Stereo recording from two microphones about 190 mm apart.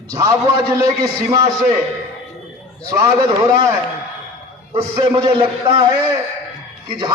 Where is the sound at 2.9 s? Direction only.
15° right (ahead or behind).